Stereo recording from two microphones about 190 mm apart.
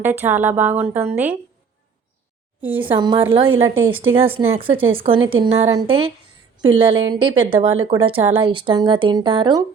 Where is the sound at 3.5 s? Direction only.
90° right.